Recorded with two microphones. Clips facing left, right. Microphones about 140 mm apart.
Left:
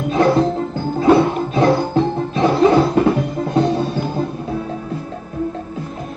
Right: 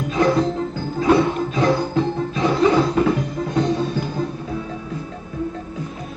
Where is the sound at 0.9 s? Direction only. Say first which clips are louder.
Left 4 dB; 35° left (ahead or behind).